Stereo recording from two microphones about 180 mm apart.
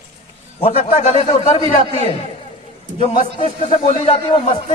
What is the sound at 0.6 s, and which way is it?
A man's voice, 35° left (ahead or behind).